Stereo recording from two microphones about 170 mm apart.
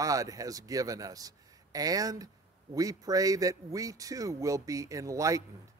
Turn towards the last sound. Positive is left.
turn(degrees=-20)  # may be behind; listen again after turning